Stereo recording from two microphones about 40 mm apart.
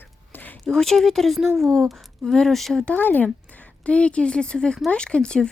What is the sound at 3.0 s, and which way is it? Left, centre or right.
Speech, left.